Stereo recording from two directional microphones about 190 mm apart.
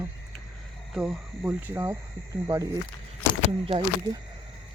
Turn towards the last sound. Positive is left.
turn(degrees=-25)  # may be behind; listen again after turning